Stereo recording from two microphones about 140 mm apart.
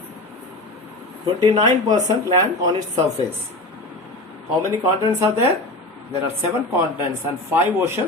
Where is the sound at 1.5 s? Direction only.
30° right (ahead or behind).